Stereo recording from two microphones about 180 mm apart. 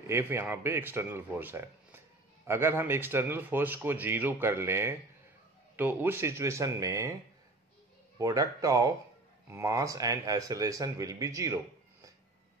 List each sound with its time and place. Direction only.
0.0 s speech: 15° right (ahead or behind)
8.2 s speech: 20° right (ahead or behind)